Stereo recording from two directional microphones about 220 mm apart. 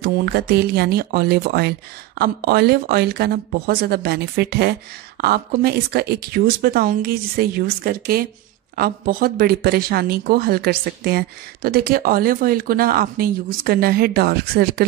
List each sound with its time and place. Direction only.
0.0 s speech: 45° right (ahead or behind)